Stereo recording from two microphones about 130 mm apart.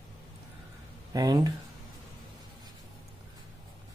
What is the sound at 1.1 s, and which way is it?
Speech, 30° right (ahead or behind).